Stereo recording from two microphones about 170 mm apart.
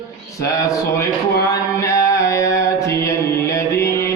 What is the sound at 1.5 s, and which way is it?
Mantra, 20° left (ahead or behind).